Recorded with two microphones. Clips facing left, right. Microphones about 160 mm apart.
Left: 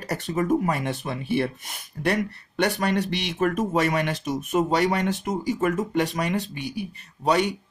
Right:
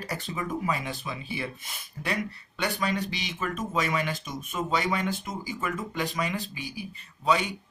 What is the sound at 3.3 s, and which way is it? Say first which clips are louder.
Speech: left 8 dB; 55° left (ahead or behind).